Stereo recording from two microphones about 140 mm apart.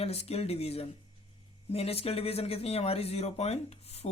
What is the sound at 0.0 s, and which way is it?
Speech, 45° left (ahead or behind).